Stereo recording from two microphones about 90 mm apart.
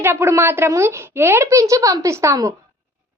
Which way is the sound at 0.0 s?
30° right (ahead or behind).